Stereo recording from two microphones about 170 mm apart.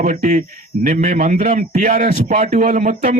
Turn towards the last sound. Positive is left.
turn(degrees=-45)  # may be behind; listen again after turning